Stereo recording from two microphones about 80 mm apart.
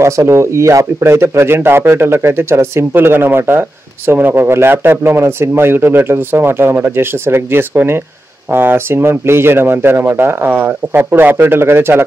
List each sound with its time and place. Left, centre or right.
0.0 s a man's voice: right